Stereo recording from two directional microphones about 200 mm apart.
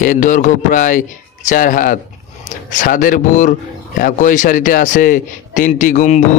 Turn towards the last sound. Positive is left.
turn(degrees=40)  # may be behind; listen again after turning